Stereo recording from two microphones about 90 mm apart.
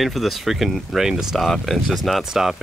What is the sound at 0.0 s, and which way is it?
Speech, centre (ahead or behind).